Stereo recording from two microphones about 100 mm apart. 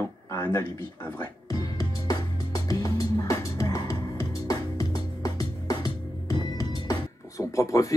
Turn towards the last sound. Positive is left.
turn(degrees=35)  # may be behind; listen again after turning